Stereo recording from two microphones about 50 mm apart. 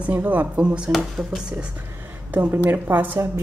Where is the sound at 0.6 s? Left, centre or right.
Right.